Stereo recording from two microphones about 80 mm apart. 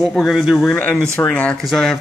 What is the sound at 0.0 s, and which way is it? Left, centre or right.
Speech, centre.